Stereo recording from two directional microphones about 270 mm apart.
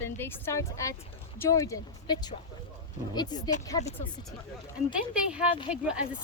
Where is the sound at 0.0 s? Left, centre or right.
Centre.